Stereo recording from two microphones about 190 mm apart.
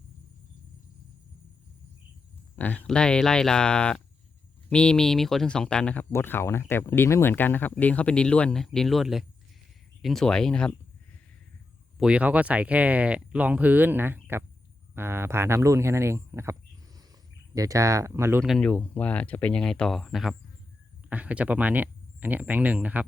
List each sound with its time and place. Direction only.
2.6 s speech: 10° left (ahead or behind)
11.9 s speech: 5° right (ahead or behind)
18.4 s speech: 5° left (ahead or behind)